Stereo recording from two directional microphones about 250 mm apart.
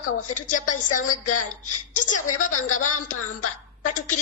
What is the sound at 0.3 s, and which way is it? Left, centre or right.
Speech, left.